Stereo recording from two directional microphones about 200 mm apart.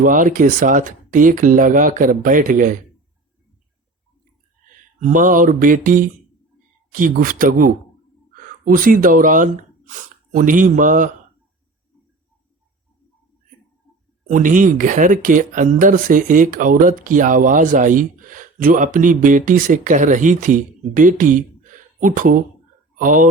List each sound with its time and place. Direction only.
0.0 s speech: 40° right (ahead or behind)
4.7 s speech: 40° right (ahead or behind)
14.3 s speech: 40° right (ahead or behind)